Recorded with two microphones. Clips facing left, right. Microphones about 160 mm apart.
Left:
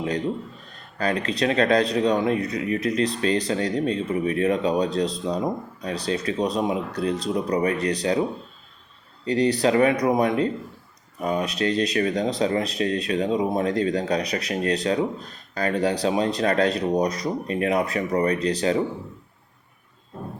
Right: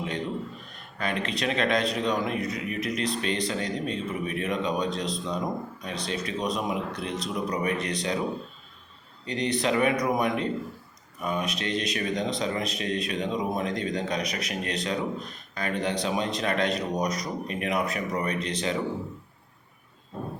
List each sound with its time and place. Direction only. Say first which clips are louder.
0.7 s speech: left 7 dB; 35° left (ahead or behind)
9.2 s speech: left 7 dB; 35° left (ahead or behind)